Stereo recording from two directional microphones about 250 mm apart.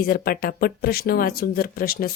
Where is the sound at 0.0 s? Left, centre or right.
Left.